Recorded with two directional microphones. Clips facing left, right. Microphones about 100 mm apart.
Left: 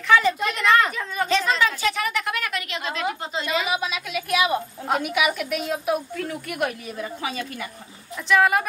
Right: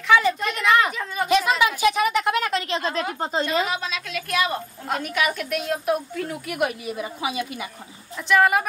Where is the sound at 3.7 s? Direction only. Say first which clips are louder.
Left 2 dB; 10° left (ahead or behind).